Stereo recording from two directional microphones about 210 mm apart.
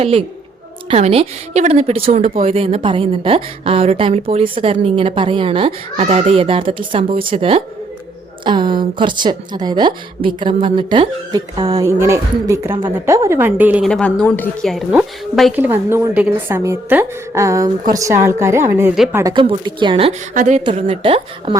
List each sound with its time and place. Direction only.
0.0 s a woman's voice: 25° right (ahead or behind); by 19.2 s 5° right (ahead or behind)
19.2 s a woman's voice: 25° right (ahead or behind)
20.3 s a woman's voice: 40° right (ahead or behind)
20.7 s a woman's voice: 30° right (ahead or behind)